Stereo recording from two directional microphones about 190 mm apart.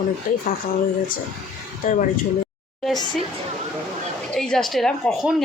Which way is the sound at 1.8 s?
45° left (ahead or behind).